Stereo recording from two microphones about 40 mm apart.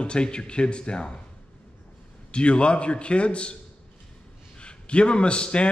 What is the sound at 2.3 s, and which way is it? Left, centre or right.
A man's voice, left.